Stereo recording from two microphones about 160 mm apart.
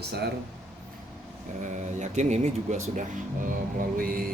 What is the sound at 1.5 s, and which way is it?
Speech, 55° right (ahead or behind).